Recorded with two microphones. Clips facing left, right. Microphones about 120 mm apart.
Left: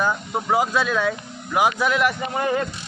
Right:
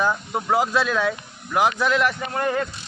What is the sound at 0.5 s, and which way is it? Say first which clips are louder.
Speech: even; centre (ahead or behind).